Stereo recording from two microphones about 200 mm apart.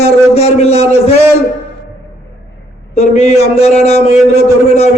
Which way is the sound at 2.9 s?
35° left (ahead or behind).